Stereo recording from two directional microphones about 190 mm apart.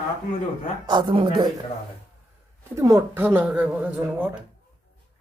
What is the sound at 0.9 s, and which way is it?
Speech, 25° right (ahead or behind).